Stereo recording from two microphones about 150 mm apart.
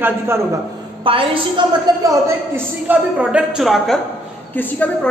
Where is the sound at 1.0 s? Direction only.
35° right (ahead or behind).